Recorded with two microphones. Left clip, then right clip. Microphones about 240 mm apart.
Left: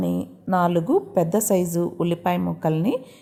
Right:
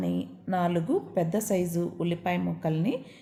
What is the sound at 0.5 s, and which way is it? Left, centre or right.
A woman's voice, left.